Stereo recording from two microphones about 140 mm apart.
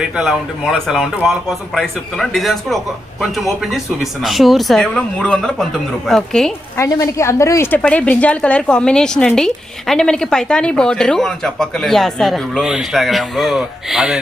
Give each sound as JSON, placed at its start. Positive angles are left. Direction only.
{"t": 0.0, "sound": "speech", "side_deg": -5}
{"t": 6.7, "sound": "a woman's voice", "side_deg": 20}
{"t": 7.8, "sound": "speech", "side_deg": 10}